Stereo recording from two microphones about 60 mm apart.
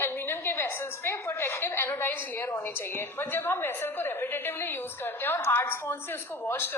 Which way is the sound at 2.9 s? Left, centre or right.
Left.